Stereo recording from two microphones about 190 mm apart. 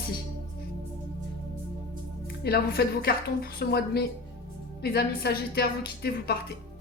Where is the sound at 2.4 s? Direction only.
55° left (ahead or behind).